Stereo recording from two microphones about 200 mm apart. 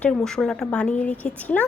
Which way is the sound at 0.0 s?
5° left (ahead or behind).